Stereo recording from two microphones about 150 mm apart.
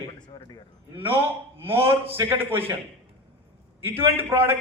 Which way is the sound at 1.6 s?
15° right (ahead or behind).